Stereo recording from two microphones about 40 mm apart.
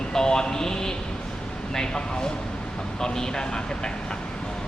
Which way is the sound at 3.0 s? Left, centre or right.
Centre.